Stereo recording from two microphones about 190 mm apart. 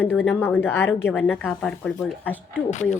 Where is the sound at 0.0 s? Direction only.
10° left (ahead or behind).